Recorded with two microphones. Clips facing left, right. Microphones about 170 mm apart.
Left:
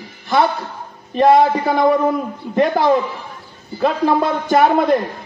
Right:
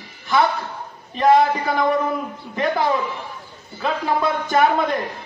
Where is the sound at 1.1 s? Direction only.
40° left (ahead or behind).